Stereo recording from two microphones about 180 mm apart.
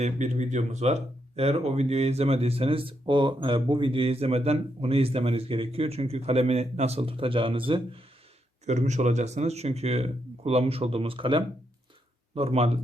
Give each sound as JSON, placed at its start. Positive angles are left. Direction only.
{"t": 0.0, "sound": "speech", "side_deg": -40}
{"t": 8.6, "sound": "speech", "side_deg": -40}